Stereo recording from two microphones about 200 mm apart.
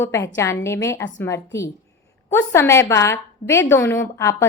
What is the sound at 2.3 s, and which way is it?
A woman's voice, 10° left (ahead or behind).